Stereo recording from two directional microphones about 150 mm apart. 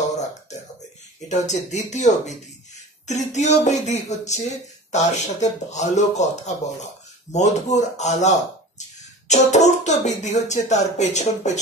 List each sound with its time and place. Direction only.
1.3 s speech: 50° left (ahead or behind)